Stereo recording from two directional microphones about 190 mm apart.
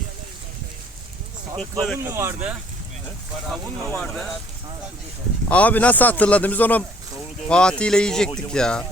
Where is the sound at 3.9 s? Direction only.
Centre (ahead or behind).